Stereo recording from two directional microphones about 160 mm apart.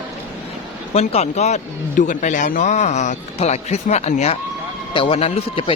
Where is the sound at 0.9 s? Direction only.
40° left (ahead or behind).